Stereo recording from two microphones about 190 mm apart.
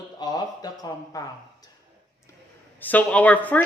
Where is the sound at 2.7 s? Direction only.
10° left (ahead or behind).